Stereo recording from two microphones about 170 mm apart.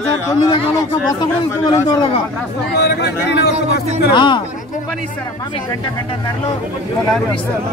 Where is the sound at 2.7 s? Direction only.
75° left (ahead or behind).